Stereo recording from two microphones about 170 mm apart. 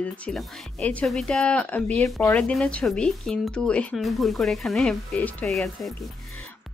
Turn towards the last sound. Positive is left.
turn(degrees=0)  # may be behind; listen again after turning